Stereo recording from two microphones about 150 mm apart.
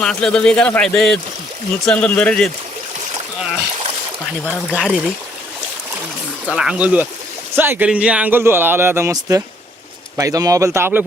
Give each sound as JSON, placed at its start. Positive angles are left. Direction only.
{"t": 0.0, "sound": "speech", "side_deg": 5}
{"t": 4.8, "sound": "speech", "side_deg": -5}
{"t": 6.5, "sound": "a man's voice", "side_deg": -5}